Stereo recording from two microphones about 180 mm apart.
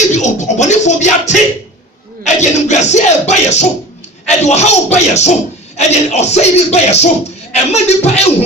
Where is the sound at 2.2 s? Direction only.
40° left (ahead or behind).